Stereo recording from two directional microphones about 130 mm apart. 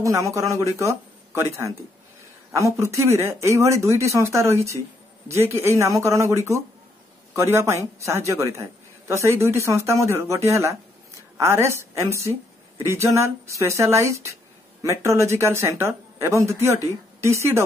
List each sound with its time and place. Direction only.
0.0 s a man's voice: 25° right (ahead or behind)